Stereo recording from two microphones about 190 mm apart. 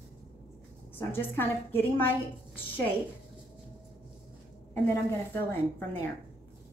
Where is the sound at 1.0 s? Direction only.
10° left (ahead or behind).